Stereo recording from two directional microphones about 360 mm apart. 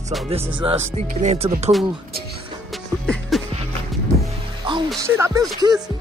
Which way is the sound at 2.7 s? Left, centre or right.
Centre.